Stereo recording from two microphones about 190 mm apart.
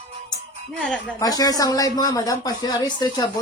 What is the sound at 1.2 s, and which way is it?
Speech, 20° left (ahead or behind).